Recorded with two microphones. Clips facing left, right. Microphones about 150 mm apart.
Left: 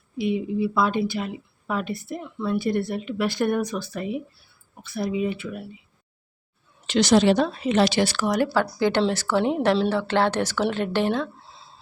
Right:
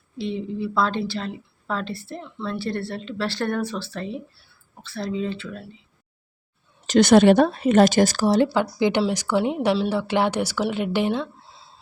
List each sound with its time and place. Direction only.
0.2 s a woman's voice: 10° left (ahead or behind)
6.8 s a woman's voice: 50° right (ahead or behind)
8.5 s speech: 15° right (ahead or behind)
9.6 s speech: 5° right (ahead or behind)